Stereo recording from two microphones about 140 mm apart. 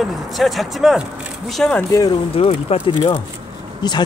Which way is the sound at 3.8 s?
30° left (ahead or behind).